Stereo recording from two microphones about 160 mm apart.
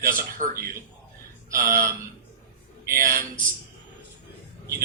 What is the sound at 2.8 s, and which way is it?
Speech, 65° right (ahead or behind).